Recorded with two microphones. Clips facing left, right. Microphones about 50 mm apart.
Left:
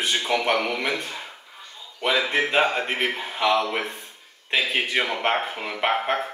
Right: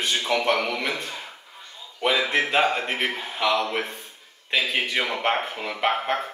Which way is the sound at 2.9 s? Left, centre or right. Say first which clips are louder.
Left 1 dB; centre.